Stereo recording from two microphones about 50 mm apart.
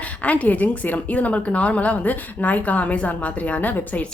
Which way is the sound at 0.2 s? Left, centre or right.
Left.